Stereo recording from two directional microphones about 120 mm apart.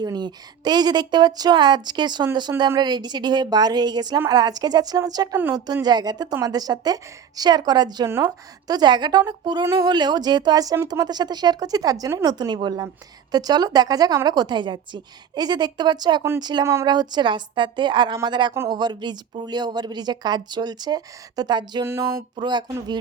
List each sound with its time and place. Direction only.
0.0 s speech: 35° right (ahead or behind)